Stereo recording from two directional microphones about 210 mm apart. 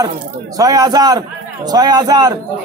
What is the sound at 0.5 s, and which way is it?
A man's voice, 15° right (ahead or behind).